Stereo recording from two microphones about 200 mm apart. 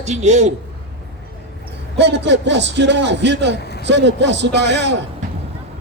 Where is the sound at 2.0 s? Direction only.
60° right (ahead or behind).